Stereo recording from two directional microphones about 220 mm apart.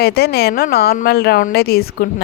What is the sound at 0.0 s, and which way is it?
Speech, 45° left (ahead or behind).